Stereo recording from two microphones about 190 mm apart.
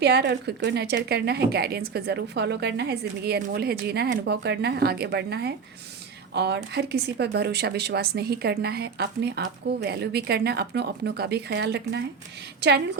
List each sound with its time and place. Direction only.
0.0 s a woman's voice: 60° right (ahead or behind)